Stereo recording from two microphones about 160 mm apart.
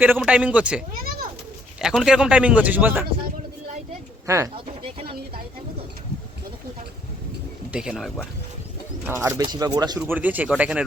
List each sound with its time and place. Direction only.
0.0 s speech: 10° right (ahead or behind)
4.3 s speech: 20° right (ahead or behind)
7.7 s speech: 5° right (ahead or behind)
9.0 s speech: 15° right (ahead or behind)
10.0 s speech: 10° right (ahead or behind)